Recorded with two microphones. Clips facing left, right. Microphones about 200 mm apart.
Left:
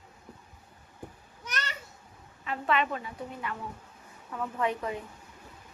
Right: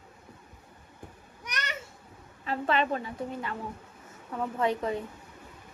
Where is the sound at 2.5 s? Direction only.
35° right (ahead or behind).